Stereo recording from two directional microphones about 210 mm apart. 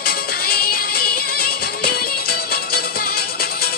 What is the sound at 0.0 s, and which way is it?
Music, 45° left (ahead or behind).